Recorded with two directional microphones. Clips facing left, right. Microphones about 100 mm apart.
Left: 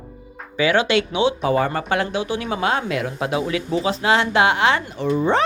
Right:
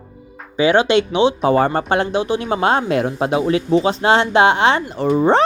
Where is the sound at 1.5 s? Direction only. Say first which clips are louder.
Right 4 dB; 35° right (ahead or behind).